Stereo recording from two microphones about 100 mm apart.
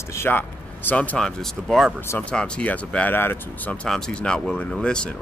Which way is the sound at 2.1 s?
15° left (ahead or behind).